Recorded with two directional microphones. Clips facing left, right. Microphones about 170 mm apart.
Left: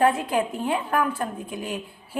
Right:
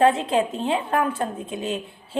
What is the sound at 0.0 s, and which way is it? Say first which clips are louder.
A woman's voice: right 3 dB; 25° right (ahead or behind).